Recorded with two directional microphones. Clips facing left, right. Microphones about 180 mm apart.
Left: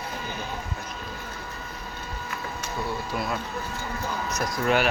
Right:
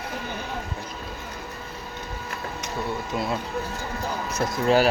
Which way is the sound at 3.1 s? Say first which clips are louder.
Right 5 dB; 25° right (ahead or behind).